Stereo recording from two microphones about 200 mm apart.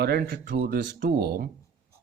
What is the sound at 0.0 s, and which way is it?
Speech, 50° right (ahead or behind).